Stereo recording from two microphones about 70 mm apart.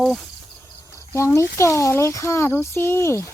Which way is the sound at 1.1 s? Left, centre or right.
Left.